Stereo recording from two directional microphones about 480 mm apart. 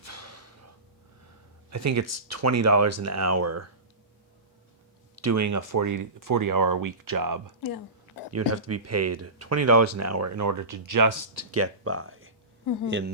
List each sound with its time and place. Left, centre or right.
0.0 s gasp: right
1.7 s speech: right
5.2 s speech: right
8.3 s speech: right
12.6 s speech: left